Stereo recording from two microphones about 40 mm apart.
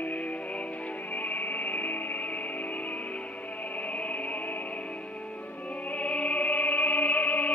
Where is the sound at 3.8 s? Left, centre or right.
Left.